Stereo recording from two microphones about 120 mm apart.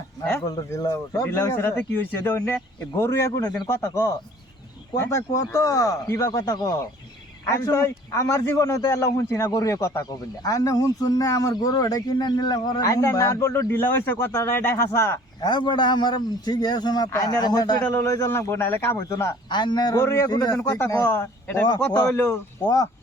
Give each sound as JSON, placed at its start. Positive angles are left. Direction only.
{"t": 0.4, "sound": "a man's voice", "side_deg": 35}
{"t": 15.4, "sound": "a man's voice", "side_deg": 40}
{"t": 17.8, "sound": "a man's voice", "side_deg": 20}
{"t": 19.5, "sound": "a man's voice", "side_deg": 40}
{"t": 20.0, "sound": "a man's voice", "side_deg": 20}
{"t": 20.3, "sound": "a man's voice", "side_deg": 35}
{"t": 20.7, "sound": "a man's voice", "side_deg": 20}
{"t": 22.1, "sound": "a man's voice", "side_deg": 30}